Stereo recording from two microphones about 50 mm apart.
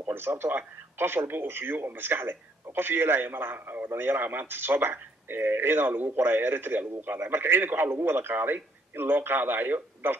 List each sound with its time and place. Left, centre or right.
0.1 s speech: right